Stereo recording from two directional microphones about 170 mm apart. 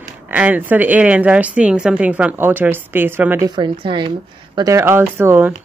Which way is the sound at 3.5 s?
25° right (ahead or behind).